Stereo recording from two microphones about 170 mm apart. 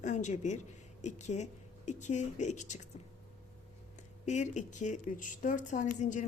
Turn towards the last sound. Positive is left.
turn(degrees=45)  # may be behind; listen again after turning